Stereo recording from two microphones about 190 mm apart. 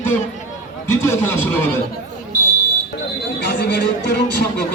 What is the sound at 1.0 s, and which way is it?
Speech, 10° left (ahead or behind).